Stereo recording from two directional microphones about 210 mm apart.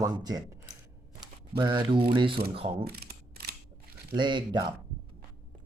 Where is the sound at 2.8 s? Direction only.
50° right (ahead or behind).